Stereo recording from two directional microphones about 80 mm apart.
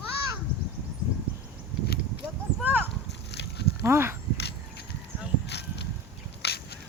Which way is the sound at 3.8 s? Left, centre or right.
Right.